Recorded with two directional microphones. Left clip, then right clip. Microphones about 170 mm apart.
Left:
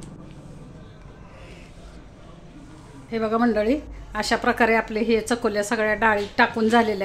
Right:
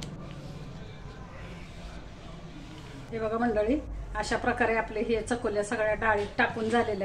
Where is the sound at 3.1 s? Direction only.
70° left (ahead or behind).